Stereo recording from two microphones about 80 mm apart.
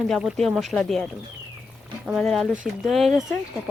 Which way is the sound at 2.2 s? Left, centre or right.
Centre.